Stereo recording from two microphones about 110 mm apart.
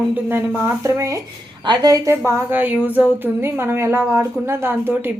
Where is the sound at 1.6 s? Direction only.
40° right (ahead or behind).